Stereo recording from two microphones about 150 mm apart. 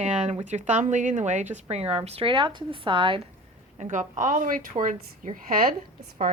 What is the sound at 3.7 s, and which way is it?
A woman's voice, 55° right (ahead or behind).